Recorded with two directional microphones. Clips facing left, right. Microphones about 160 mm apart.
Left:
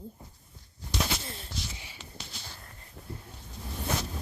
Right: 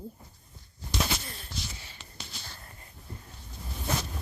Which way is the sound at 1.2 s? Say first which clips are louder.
Left 1 dB; 25° left (ahead or behind).